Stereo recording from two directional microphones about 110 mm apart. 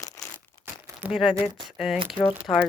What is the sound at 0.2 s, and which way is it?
Crumpling, 30° left (ahead or behind).